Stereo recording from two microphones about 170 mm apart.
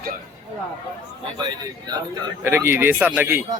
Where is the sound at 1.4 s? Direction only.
25° right (ahead or behind).